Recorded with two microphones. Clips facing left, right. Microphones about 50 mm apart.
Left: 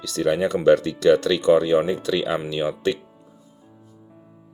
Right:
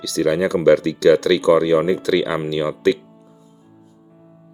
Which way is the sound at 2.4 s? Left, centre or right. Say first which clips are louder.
Right 5 dB; right.